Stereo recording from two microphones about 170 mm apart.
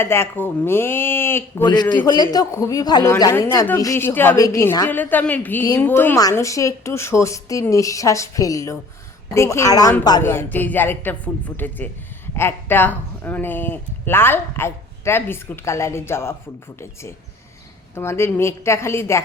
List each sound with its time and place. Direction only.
0.0 s a woman's voice: 15° left (ahead or behind)
1.6 s a man's voice: 25° left (ahead or behind)
17.9 s a woman's voice: 15° left (ahead or behind)